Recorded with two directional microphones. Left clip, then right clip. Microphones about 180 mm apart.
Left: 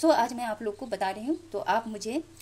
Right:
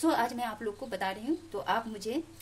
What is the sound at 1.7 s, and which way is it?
Speech, 25° left (ahead or behind).